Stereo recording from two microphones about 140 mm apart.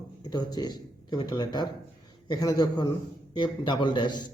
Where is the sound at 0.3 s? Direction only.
30° left (ahead or behind).